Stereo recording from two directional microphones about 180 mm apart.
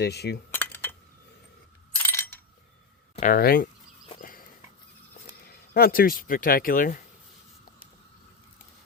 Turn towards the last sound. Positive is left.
turn(degrees=50)  # may be behind; listen again after turning